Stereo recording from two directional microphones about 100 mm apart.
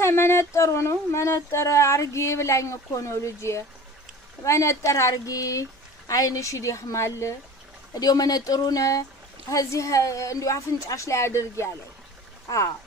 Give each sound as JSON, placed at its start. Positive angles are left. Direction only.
{"t": 0.0, "sound": "speech", "side_deg": 25}
{"t": 7.9, "sound": "speech", "side_deg": 40}